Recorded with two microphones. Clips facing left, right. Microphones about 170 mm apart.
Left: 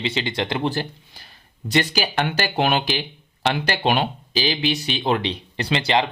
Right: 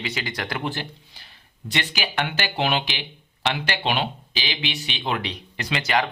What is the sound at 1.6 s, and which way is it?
Speech, 40° left (ahead or behind).